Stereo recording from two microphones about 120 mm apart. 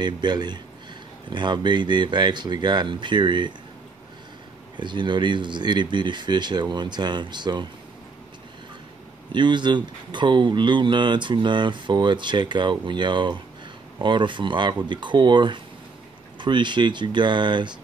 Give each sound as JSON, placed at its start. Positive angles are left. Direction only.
{"t": 0.0, "sound": "speech", "side_deg": -35}
{"t": 4.7, "sound": "speech", "side_deg": -40}
{"t": 9.3, "sound": "speech", "side_deg": -40}